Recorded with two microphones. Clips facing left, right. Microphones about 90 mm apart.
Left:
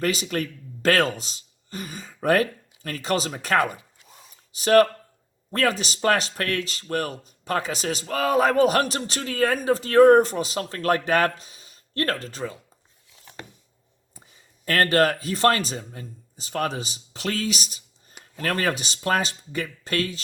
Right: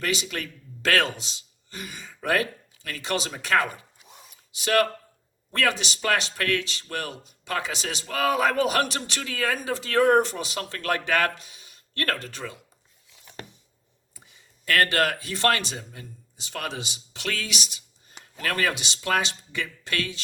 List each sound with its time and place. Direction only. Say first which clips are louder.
0.0 s speech: left 4 dB; 40° left (ahead or behind)
4.0 s a sound: right 1 dB; 10° right (ahead or behind)
4.5 s speech: left 6 dB; 40° left (ahead or behind)
14.2 s speech: left 2 dB; 35° left (ahead or behind)